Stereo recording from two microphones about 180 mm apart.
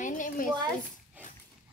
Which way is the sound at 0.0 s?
45° left (ahead or behind).